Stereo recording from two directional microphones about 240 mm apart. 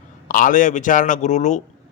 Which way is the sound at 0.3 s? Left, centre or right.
Left.